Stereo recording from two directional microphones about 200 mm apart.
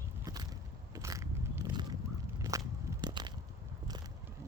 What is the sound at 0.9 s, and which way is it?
Biting, 15° right (ahead or behind).